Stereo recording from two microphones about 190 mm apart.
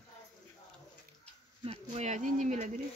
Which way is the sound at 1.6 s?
35° right (ahead or behind).